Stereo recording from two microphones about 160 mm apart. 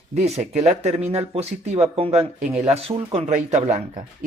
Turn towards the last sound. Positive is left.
turn(degrees=-45)  # may be behind; listen again after turning